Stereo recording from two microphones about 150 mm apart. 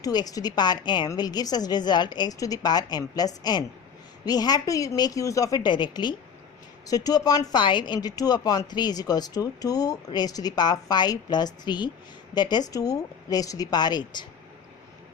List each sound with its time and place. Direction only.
0.0 s speech: 25° left (ahead or behind)